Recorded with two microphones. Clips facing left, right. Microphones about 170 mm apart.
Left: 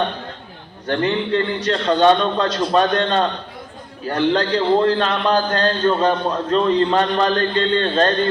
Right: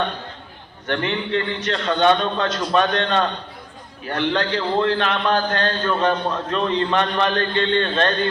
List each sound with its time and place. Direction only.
0.9 s a man's voice: 35° left (ahead or behind)